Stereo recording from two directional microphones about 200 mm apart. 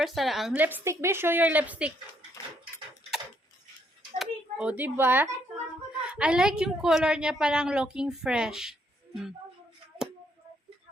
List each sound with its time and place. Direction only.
0.0 s a woman's voice: centre (ahead or behind)
4.2 s a child's voice: 5° right (ahead or behind)